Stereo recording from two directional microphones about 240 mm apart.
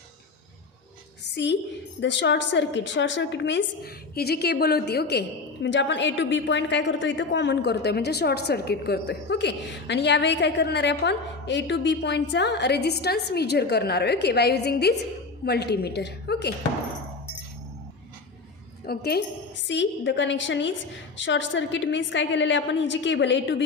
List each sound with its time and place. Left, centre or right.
2.0 s a woman's voice: left
18.9 s a woman's voice: left